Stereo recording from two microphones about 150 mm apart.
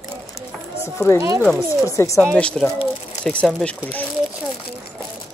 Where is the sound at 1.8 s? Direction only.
20° left (ahead or behind).